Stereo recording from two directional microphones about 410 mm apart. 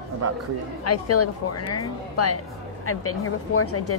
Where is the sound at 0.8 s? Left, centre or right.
Left.